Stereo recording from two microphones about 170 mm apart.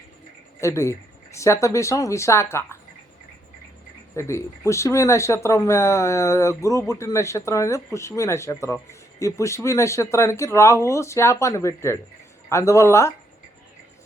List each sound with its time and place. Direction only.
0.6 s speech: 15° left (ahead or behind)
4.1 s speech: 15° left (ahead or behind)